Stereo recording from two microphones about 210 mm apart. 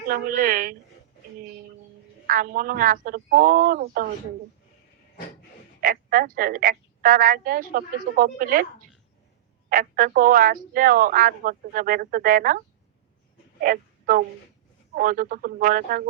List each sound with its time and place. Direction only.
0.1 s a woman's voice: 40° right (ahead or behind)
2.2 s speech: 40° right (ahead or behind)
5.8 s speech: 40° right (ahead or behind)
9.6 s speech: 40° right (ahead or behind)